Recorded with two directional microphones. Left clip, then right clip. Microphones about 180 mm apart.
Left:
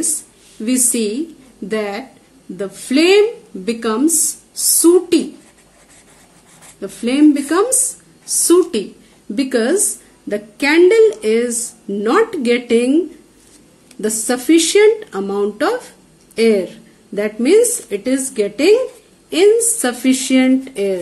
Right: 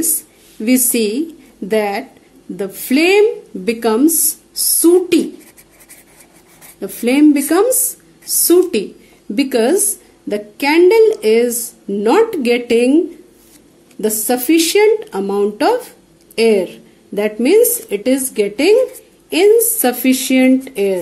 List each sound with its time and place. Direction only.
0.6 s a woman's voice: 35° right (ahead or behind)
6.8 s a woman's voice: 35° right (ahead or behind)
7.8 s a sound: 30° right (ahead or behind)
9.3 s a woman's voice: 30° right (ahead or behind)
14.0 s a woman's voice: 25° right (ahead or behind)